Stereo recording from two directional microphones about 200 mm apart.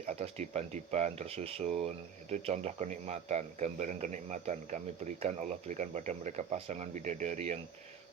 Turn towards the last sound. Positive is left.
turn(degrees=-35)  # may be behind; listen again after turning